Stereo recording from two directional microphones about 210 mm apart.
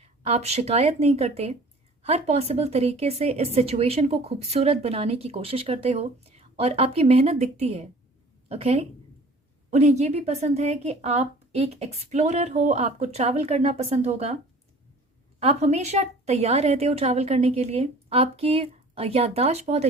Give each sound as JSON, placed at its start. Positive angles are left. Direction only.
{"t": 0.0, "sound": "a woman's voice", "side_deg": -30}
{"t": 15.4, "sound": "speech", "side_deg": -30}